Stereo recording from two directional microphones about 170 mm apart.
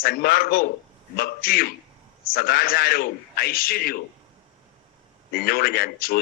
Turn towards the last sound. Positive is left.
turn(degrees=60)  # may be behind; listen again after turning